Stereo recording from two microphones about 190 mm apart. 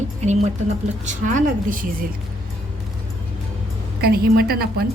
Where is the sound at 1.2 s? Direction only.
45° right (ahead or behind).